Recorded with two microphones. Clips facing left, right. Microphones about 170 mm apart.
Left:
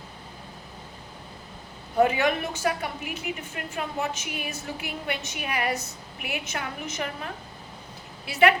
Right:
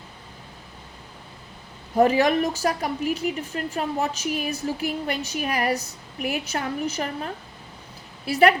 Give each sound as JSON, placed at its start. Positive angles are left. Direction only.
{"t": 2.0, "sound": "a woman's voice", "side_deg": -40}
{"t": 8.3, "sound": "a woman's voice", "side_deg": -35}